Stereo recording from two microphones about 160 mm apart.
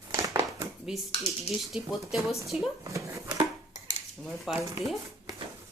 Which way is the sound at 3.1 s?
20° right (ahead or behind).